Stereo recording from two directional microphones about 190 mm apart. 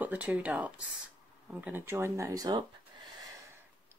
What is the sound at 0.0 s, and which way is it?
Speech, 10° right (ahead or behind).